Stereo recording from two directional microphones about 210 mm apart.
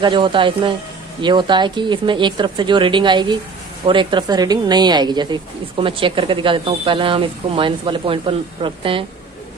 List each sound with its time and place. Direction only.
0.0 s a woman's voice: 25° right (ahead or behind)